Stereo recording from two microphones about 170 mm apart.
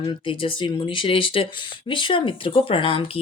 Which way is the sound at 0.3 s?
30° left (ahead or behind).